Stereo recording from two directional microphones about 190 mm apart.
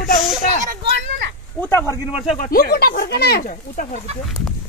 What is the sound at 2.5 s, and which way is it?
Speech, 55° left (ahead or behind).